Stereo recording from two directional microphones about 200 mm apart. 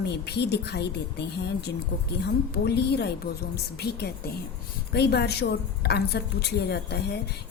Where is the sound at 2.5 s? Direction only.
55° left (ahead or behind).